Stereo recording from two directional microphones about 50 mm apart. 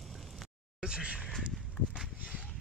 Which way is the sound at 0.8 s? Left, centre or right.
Right.